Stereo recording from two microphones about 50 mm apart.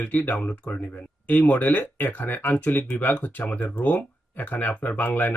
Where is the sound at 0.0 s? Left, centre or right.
Left.